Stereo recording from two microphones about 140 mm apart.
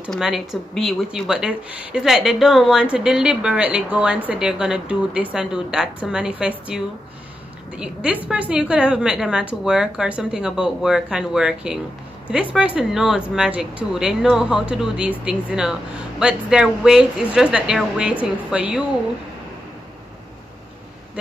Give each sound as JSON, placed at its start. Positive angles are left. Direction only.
{"t": 0.1, "sound": "a woman's voice", "side_deg": 0}